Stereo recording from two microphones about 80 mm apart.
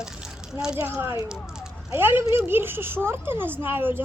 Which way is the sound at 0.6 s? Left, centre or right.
Centre.